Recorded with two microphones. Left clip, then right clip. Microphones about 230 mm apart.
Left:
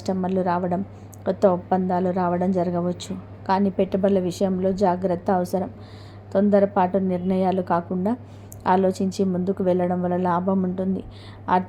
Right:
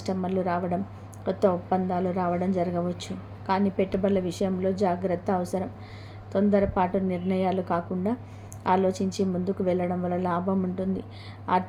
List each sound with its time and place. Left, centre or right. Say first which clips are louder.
0.0 s a woman's voice: left 4 dB; centre